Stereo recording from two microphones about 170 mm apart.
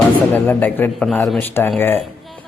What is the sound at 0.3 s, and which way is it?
Speech, 10° left (ahead or behind).